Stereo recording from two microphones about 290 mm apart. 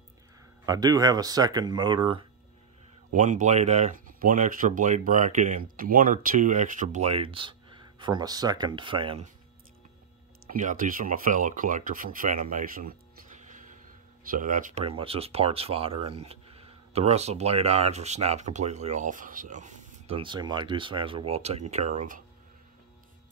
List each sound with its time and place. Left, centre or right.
0.7 s speech: centre
10.5 s speech: right